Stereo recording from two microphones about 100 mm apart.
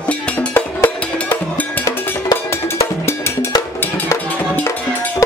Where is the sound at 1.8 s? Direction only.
30° left (ahead or behind).